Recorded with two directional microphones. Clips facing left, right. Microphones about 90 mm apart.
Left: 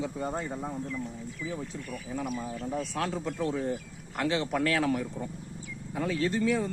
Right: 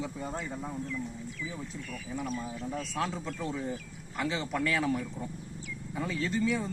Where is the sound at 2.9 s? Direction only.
65° left (ahead or behind).